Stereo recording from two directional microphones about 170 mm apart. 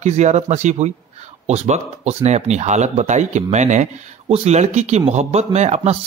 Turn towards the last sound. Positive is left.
turn(degrees=-40)  # may be behind; listen again after turning